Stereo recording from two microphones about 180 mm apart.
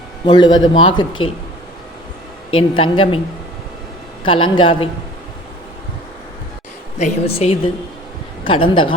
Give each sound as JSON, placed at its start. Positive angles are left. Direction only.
{"t": 0.3, "sound": "a man's voice", "side_deg": 25}
{"t": 2.6, "sound": "a man's voice", "side_deg": 30}
{"t": 4.2, "sound": "a man's voice", "side_deg": 25}
{"t": 7.0, "sound": "a woman's voice", "side_deg": 35}